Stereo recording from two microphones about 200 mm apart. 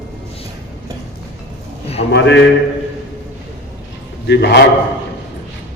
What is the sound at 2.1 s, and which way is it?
Speech, 60° left (ahead or behind).